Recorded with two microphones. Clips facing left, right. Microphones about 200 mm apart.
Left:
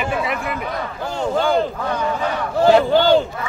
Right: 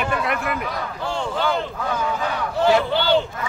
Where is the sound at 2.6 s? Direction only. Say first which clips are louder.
Left 5 dB; 40° left (ahead or behind).